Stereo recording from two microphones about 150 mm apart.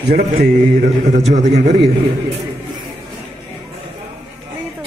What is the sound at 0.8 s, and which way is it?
Speech, 50° right (ahead or behind).